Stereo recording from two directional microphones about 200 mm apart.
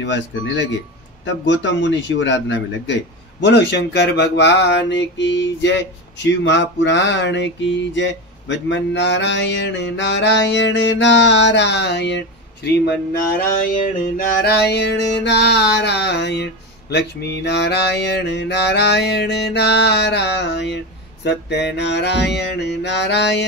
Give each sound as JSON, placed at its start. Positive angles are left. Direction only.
{"t": 0.0, "sound": "a man's voice", "side_deg": 65}
{"t": 13.7, "sound": "a man's voice", "side_deg": 45}